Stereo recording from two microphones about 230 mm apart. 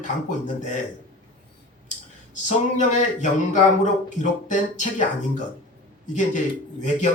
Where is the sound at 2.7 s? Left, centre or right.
Left.